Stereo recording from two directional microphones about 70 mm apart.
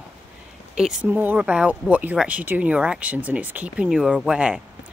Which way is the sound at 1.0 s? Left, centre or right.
Right.